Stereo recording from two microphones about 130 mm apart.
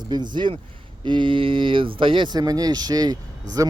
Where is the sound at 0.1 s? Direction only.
35° right (ahead or behind).